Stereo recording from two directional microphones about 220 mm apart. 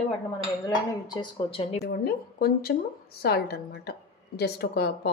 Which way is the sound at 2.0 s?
45° left (ahead or behind).